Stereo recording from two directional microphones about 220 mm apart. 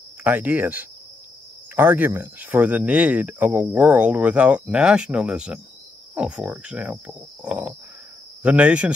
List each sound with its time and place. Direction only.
0.2 s speech: 10° right (ahead or behind)